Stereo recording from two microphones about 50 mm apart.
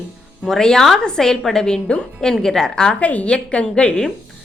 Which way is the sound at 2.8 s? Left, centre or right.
Left.